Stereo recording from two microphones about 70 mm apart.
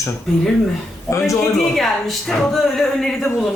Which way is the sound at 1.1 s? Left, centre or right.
Left.